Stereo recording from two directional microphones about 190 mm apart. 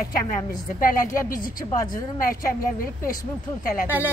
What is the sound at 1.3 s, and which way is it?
Speech, 50° left (ahead or behind).